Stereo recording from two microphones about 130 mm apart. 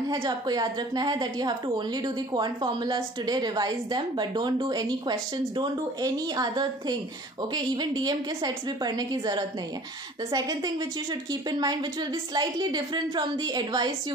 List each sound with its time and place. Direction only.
0.1 s a woman's voice: 35° right (ahead or behind)